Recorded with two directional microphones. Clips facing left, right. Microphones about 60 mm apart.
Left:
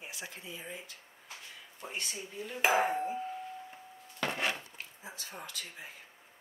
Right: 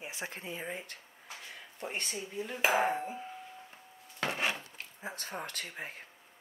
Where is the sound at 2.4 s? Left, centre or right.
Centre.